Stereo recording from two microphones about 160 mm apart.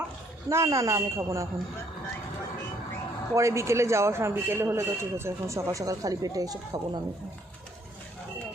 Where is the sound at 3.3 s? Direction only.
20° right (ahead or behind).